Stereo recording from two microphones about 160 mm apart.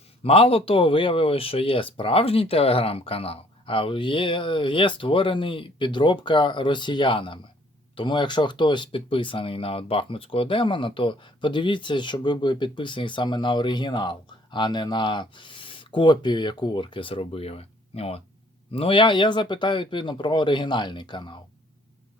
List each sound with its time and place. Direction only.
0.2 s speech: 35° left (ahead or behind)